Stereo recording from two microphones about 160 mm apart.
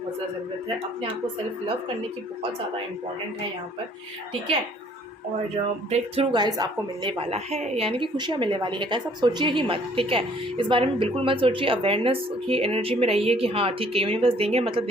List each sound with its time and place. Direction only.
5.9 s a woman's voice: 30° right (ahead or behind)